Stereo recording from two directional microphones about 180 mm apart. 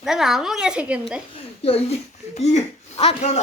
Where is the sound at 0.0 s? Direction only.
Centre (ahead or behind).